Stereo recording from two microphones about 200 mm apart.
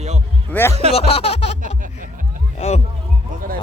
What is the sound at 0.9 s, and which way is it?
Music, 30° left (ahead or behind).